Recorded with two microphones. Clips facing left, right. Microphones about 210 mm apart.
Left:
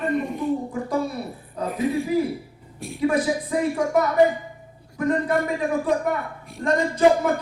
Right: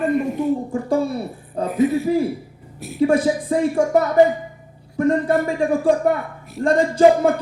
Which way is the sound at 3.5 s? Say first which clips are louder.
Right 5 dB; 30° right (ahead or behind).